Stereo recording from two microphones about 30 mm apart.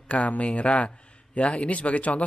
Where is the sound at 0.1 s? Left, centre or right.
Left.